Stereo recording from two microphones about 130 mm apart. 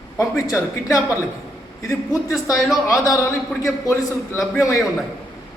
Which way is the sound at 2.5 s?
Centre (ahead or behind).